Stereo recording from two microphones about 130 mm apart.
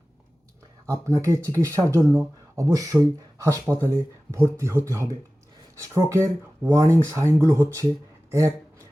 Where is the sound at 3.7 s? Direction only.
10° right (ahead or behind).